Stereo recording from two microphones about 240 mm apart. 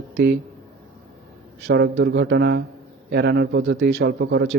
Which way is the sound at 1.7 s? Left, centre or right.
Right.